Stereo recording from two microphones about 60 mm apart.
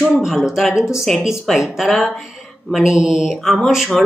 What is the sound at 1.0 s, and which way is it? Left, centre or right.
Speech, centre.